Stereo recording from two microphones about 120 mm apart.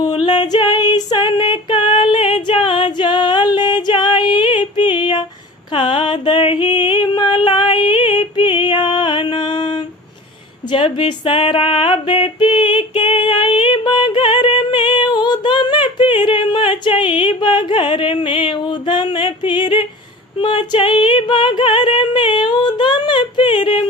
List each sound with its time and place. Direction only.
0.0 s female singing: 40° left (ahead or behind)
5.7 s music: 45° left (ahead or behind)
10.7 s a sound: 45° left (ahead or behind)